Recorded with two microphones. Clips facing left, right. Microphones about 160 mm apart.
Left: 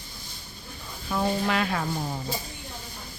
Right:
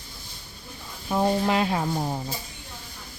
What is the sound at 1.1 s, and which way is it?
Speech, 25° right (ahead or behind).